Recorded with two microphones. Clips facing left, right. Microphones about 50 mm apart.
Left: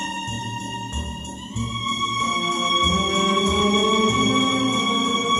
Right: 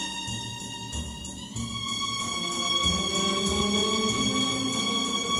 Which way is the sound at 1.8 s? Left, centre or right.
Left.